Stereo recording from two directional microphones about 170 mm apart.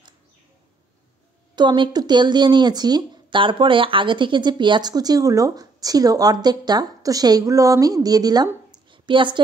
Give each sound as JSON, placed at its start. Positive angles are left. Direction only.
{"t": 1.5, "sound": "a woman's voice", "side_deg": -25}